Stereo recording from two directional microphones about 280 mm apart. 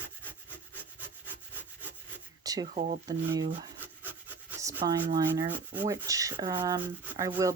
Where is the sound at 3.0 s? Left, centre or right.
Centre.